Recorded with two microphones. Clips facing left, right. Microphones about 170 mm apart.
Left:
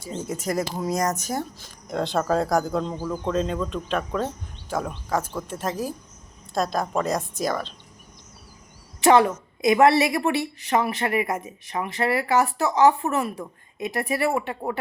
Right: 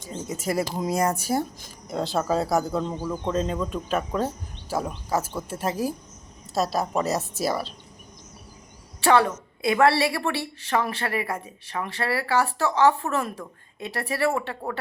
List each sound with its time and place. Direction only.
0.3 s a woman's voice: 5° right (ahead or behind)
9.0 s a woman's voice: 15° left (ahead or behind)